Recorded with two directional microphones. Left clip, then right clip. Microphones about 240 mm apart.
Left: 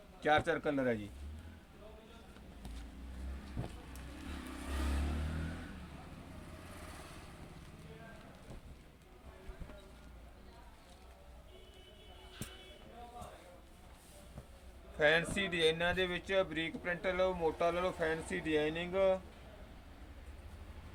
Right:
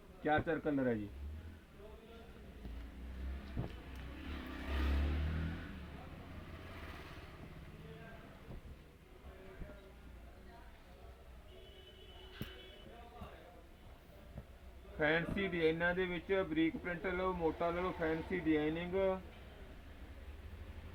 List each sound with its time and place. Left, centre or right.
0.2 s speech: centre
4.6 s vehicle: left
6.7 s motorcycle: left
14.9 s speech: left